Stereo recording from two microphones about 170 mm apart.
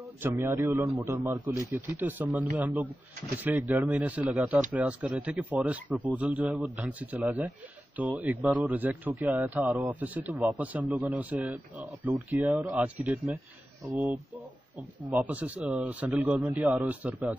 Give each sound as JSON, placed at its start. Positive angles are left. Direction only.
{"t": 0.2, "sound": "a man's voice", "side_deg": -15}
{"t": 15.0, "sound": "a man's voice", "side_deg": -10}